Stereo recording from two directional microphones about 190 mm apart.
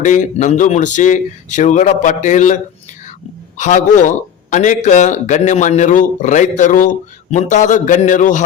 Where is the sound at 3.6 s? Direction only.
40° left (ahead or behind).